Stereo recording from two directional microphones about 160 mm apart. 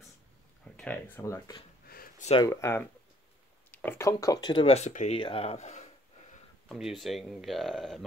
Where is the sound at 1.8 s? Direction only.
65° left (ahead or behind).